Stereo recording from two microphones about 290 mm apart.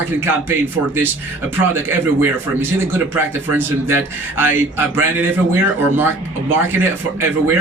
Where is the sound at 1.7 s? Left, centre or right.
Centre.